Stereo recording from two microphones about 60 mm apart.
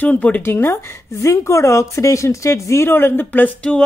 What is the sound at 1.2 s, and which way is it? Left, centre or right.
A woman's voice, left.